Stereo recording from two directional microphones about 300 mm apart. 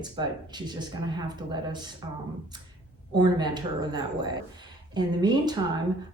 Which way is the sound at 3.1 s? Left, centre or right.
Centre.